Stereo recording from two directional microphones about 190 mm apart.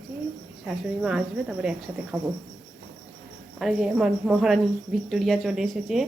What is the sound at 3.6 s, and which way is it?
A woman's voice, centre (ahead or behind).